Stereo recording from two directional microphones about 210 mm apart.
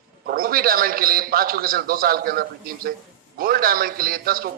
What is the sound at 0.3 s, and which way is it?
A man's voice, 45° right (ahead or behind).